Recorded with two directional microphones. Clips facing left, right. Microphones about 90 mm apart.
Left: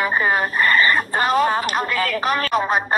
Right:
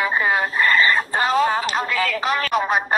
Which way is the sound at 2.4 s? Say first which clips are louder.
Left 1 dB; 35° left (ahead or behind).